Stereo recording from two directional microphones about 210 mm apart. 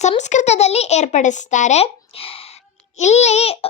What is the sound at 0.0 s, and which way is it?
A woman's voice, 35° left (ahead or behind).